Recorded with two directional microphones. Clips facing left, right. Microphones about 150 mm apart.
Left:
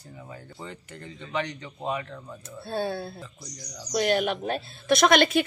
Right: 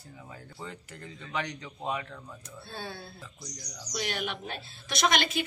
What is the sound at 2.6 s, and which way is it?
Speech, 55° left (ahead or behind).